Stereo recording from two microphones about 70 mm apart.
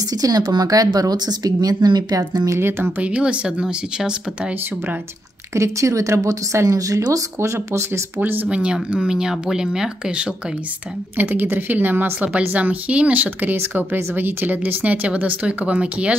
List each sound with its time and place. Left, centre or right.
0.1 s a woman's voice: right
3.0 s speech: centre
5.5 s a woman's voice: right
7.3 s a woman's voice: right
8.2 s speech: right
8.5 s speech: centre
11.1 s speech: right